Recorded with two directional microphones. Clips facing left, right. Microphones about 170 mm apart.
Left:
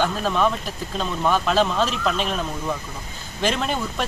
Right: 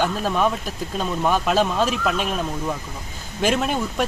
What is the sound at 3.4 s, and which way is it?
Speech, 10° right (ahead or behind).